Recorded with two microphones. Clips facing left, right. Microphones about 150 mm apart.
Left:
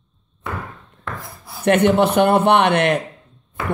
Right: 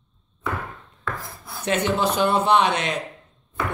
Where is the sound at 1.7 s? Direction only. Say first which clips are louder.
Left 7 dB; 60° left (ahead or behind).